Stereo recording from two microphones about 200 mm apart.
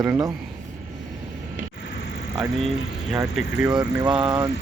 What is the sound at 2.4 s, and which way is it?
Speech, centre (ahead or behind).